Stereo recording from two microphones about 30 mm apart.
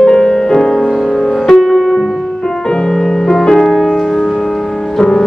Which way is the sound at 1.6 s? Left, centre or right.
Centre.